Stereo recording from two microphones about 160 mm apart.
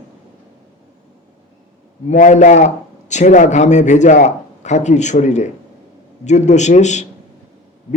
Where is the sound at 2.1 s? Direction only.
50° left (ahead or behind).